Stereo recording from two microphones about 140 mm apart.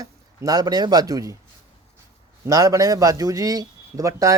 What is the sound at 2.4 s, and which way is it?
Speech, 25° right (ahead or behind).